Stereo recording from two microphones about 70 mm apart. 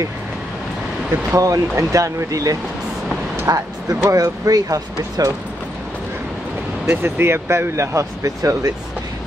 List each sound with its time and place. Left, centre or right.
1.3 s speech: right
6.9 s speech: right